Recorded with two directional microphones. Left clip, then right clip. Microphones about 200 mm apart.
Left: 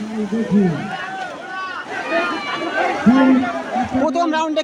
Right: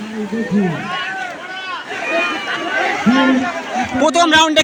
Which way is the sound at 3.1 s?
50° left (ahead or behind).